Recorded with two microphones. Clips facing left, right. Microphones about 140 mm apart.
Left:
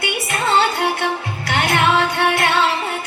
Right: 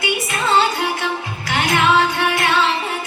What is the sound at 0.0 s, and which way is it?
Music, 60° left (ahead or behind).